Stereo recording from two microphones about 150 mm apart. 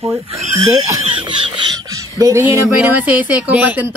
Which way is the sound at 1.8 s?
25° right (ahead or behind).